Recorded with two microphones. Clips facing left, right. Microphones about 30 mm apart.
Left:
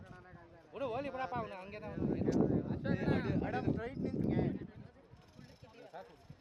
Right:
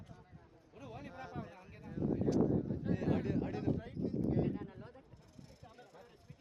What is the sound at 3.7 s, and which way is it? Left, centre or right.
Speech, left.